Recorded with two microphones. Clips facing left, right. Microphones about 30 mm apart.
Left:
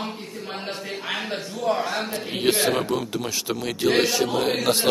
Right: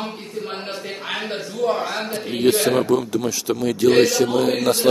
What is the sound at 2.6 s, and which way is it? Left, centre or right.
A man's voice, centre.